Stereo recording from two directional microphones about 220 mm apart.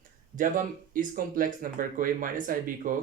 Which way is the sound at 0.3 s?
40° right (ahead or behind).